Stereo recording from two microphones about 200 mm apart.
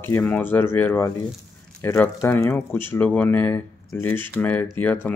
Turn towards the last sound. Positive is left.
turn(degrees=10)  # may be behind; listen again after turning